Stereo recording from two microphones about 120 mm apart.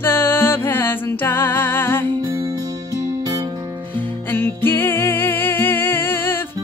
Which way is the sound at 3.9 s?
15° left (ahead or behind).